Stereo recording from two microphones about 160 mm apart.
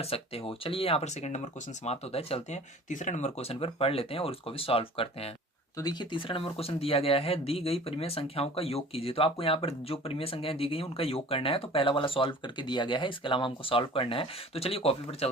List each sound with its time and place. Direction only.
0.0 s speech: 35° left (ahead or behind)
5.7 s speech: 25° left (ahead or behind)